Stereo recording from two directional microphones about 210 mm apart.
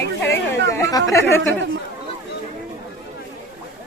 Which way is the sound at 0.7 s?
15° left (ahead or behind).